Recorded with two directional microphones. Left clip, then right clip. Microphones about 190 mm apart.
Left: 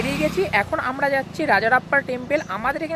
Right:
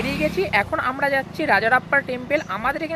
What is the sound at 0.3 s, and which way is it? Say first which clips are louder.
Speech: right 1 dB; centre (ahead or behind).